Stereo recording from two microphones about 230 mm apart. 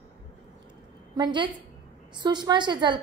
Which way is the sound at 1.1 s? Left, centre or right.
Centre.